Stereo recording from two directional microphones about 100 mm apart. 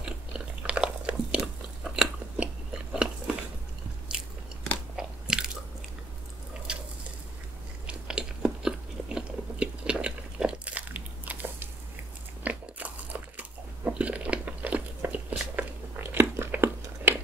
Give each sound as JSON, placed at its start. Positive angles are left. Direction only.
{"t": 0.0, "sound": "biting", "side_deg": -10}
{"t": 4.9, "sound": "crunch", "side_deg": -10}
{"t": 6.7, "sound": "a sound", "side_deg": -10}
{"t": 7.8, "sound": "biting", "side_deg": -10}